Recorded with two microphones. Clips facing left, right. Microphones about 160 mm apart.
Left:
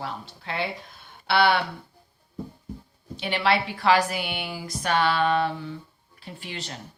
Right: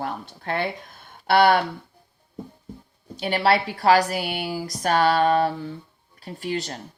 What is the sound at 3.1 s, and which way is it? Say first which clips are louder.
A woman's voice: right 3 dB; 40° right (ahead or behind).